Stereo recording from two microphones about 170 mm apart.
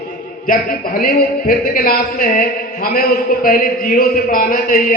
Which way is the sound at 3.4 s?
55° left (ahead or behind).